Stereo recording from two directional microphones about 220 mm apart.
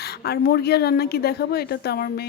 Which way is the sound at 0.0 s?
45° left (ahead or behind).